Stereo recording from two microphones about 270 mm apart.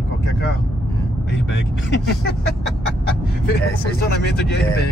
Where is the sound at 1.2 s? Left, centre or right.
Left.